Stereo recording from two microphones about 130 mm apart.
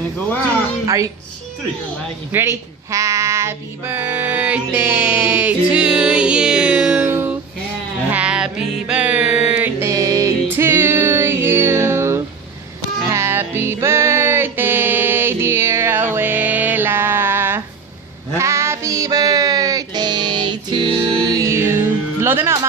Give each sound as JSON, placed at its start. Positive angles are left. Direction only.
{"t": 0.8, "sound": "speech", "side_deg": -25}
{"t": 2.3, "sound": "speech", "side_deg": -20}
{"t": 8.1, "sound": "music", "side_deg": -10}